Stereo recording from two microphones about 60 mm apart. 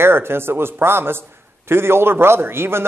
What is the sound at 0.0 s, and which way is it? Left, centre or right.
A man's voice, right.